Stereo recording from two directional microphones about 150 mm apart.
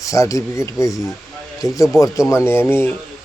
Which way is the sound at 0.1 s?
20° left (ahead or behind).